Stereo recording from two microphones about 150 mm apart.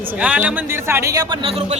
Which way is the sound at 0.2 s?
10° right (ahead or behind).